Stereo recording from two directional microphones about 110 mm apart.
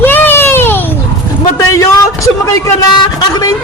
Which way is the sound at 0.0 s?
20° left (ahead or behind).